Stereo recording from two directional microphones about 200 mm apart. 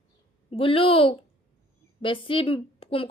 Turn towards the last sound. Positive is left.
turn(degrees=30)  # may be behind; listen again after turning